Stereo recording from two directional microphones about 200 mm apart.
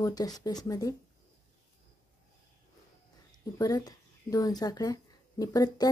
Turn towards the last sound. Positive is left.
turn(degrees=20)  # may be behind; listen again after turning